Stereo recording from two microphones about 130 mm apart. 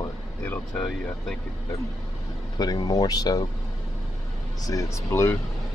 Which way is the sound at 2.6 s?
30° left (ahead or behind).